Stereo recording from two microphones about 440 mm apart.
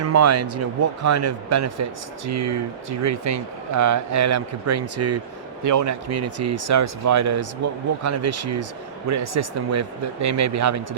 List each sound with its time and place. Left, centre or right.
0.0 s speech: right